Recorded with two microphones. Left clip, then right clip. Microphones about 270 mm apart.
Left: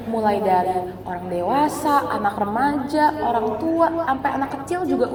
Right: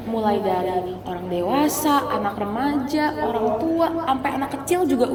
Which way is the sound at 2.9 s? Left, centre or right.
Centre.